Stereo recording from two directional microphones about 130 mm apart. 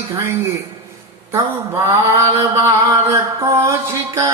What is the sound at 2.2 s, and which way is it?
Mantra, 20° right (ahead or behind).